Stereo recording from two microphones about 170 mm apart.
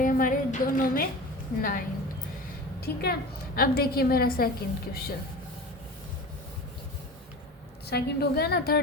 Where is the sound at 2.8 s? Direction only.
65° left (ahead or behind).